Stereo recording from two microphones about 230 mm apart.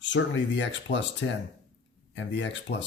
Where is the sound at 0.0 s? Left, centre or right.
Left.